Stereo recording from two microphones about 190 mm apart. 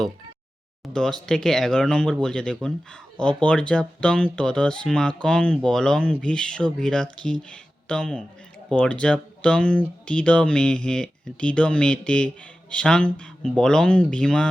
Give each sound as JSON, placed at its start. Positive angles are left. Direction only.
{"t": 0.9, "sound": "speech", "side_deg": 5}